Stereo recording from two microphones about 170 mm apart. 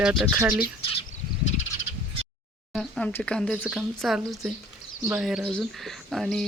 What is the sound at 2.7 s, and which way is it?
Speech, 5° left (ahead or behind).